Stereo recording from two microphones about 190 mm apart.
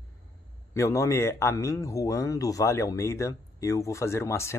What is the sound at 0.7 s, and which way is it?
Speech, 15° left (ahead or behind).